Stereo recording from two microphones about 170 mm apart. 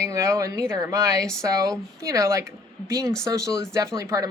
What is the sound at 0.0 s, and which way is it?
Speech, 15° right (ahead or behind).